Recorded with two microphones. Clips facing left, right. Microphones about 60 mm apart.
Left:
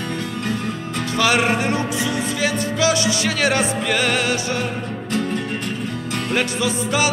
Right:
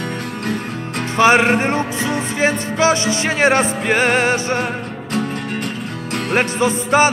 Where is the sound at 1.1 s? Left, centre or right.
Right.